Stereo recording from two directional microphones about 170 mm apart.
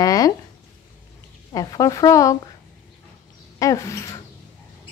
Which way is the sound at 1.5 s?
20° left (ahead or behind).